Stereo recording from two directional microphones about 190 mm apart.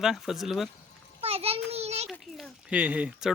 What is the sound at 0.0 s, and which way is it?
Speech, centre (ahead or behind).